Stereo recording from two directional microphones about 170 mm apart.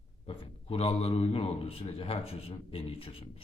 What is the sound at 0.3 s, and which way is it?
A man's voice, 35° left (ahead or behind).